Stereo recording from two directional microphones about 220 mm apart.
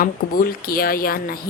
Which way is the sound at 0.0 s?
40° left (ahead or behind).